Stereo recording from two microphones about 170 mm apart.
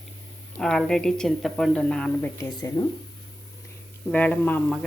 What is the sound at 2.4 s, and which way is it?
Speech, 20° left (ahead or behind).